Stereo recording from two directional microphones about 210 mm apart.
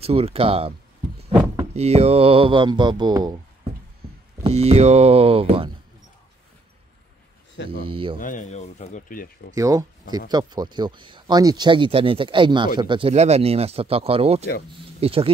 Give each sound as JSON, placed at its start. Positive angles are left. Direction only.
{"t": 0.0, "sound": "speech", "side_deg": -30}
{"t": 1.3, "sound": "a sound", "side_deg": -10}
{"t": 1.7, "sound": "speech", "side_deg": -30}
{"t": 4.4, "sound": "speech", "side_deg": -30}
{"t": 7.6, "sound": "speech", "side_deg": 55}
{"t": 7.9, "sound": "speech", "side_deg": -25}
{"t": 8.2, "sound": "speech", "side_deg": 35}
{"t": 9.6, "sound": "speech", "side_deg": -15}